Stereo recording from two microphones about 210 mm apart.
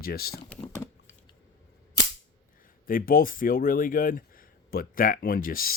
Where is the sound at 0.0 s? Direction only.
45° left (ahead or behind).